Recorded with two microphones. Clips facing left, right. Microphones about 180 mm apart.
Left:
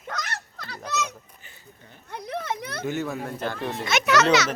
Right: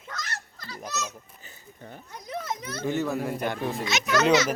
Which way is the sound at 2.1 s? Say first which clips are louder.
Left 3 dB; 65° left (ahead or behind).